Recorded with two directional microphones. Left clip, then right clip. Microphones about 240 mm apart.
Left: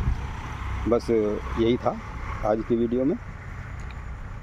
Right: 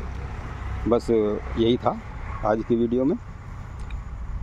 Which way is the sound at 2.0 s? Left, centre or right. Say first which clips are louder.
Left 2 dB; left.